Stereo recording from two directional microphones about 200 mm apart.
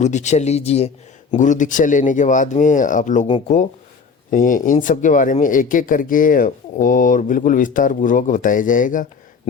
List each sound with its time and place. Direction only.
0.0 s speech: 35° left (ahead or behind)
4.3 s speech: 40° left (ahead or behind)